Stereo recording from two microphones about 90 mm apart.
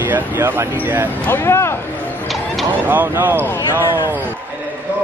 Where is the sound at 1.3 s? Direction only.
30° left (ahead or behind).